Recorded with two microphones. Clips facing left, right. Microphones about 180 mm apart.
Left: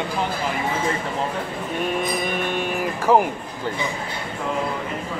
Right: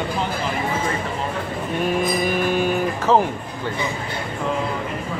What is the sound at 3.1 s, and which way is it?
Speech, 10° left (ahead or behind).